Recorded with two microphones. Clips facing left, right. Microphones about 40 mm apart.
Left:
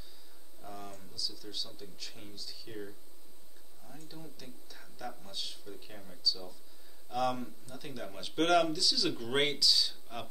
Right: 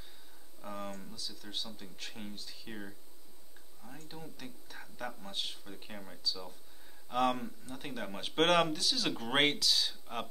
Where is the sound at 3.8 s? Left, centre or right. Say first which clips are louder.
Right 1 dB; right.